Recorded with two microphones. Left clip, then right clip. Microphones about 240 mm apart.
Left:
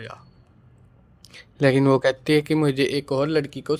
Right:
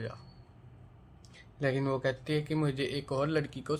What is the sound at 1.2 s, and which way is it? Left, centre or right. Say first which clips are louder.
Speech: left 13 dB; left.